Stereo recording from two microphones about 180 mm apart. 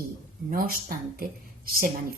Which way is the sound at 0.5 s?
50° right (ahead or behind).